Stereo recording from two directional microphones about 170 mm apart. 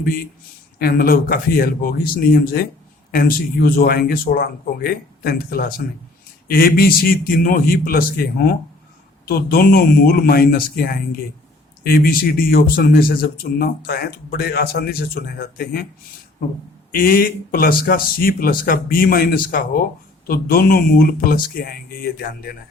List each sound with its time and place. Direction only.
0.8 s speech: 60° left (ahead or behind)
16.9 s speech: 55° left (ahead or behind)